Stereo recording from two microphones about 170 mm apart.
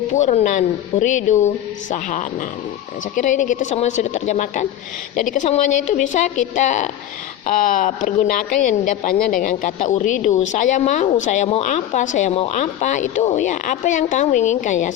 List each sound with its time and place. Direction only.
0.1 s speech: 45° left (ahead or behind)